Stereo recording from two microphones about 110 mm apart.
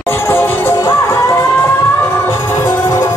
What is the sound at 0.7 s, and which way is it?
Music, 30° left (ahead or behind).